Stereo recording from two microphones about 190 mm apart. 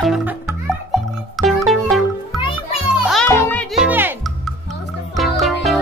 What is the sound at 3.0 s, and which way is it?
Music, centre (ahead or behind).